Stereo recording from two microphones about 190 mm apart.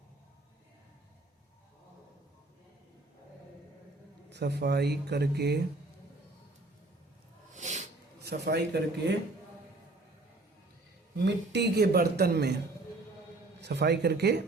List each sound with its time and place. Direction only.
4.3 s speech: 60° right (ahead or behind)
7.5 s snort: 40° right (ahead or behind)
8.2 s speech: 60° right (ahead or behind)
11.3 s speech: 65° right (ahead or behind)
13.6 s speech: 60° right (ahead or behind)